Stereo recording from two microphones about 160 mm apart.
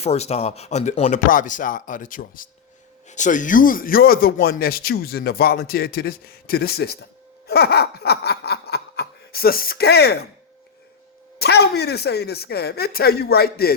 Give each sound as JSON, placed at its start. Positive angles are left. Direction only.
{"t": 0.0, "sound": "speech", "side_deg": 40}
{"t": 1.3, "sound": "speech", "side_deg": 55}
{"t": 7.4, "sound": "a sound", "side_deg": 85}
{"t": 11.3, "sound": "speech", "side_deg": 90}